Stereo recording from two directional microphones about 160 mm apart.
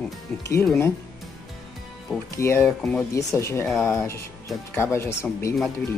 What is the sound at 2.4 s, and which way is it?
Speech, 15° left (ahead or behind).